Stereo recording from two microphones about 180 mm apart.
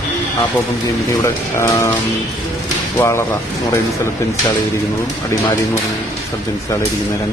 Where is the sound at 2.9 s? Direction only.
15° left (ahead or behind).